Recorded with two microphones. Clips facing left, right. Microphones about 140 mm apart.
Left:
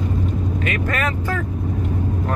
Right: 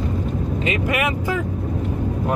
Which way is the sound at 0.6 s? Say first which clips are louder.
Right 3 dB; 15° right (ahead or behind).